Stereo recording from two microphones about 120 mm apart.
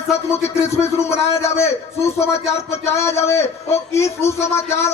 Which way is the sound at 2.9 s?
25° left (ahead or behind).